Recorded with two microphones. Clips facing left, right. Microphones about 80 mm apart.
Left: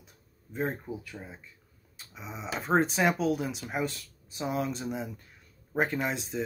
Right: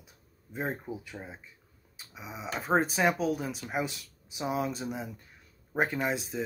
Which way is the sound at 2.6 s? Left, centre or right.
Centre.